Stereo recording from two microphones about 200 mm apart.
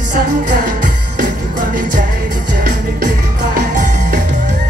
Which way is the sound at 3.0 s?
45° right (ahead or behind).